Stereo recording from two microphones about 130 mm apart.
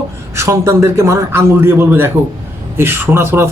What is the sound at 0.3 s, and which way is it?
A man's voice, 25° right (ahead or behind).